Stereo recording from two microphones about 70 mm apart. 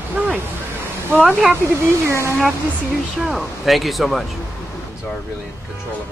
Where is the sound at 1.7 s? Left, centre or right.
Right.